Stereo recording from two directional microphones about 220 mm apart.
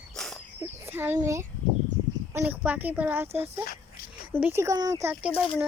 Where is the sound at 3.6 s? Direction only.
40° left (ahead or behind).